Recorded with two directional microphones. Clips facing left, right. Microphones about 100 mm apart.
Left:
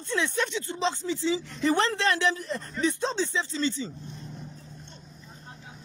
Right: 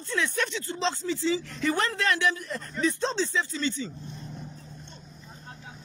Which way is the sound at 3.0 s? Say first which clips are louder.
Right 1 dB; 15° left (ahead or behind).